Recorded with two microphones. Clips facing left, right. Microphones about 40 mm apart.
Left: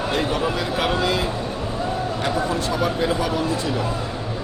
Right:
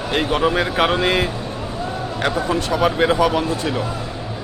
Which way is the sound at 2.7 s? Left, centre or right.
Right.